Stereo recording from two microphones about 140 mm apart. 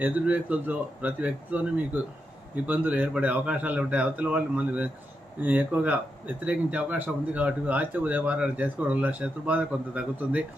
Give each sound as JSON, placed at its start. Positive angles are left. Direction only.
{"t": 0.0, "sound": "speech", "side_deg": -10}